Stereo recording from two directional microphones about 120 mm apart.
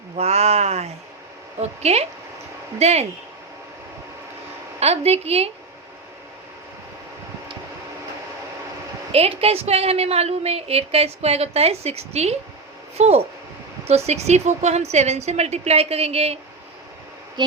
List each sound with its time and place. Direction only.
0.2 s a woman's voice: 65° right (ahead or behind)
4.8 s a woman's voice: 60° right (ahead or behind)
9.1 s a woman's voice: 55° right (ahead or behind)